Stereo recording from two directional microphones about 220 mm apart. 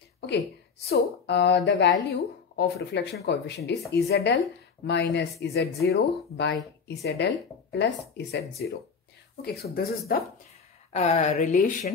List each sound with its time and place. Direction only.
0.8 s speech: 50° left (ahead or behind)
10.9 s speech: 30° left (ahead or behind)